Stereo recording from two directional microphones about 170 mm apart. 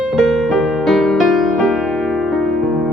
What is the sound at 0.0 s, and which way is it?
Music, centre (ahead or behind).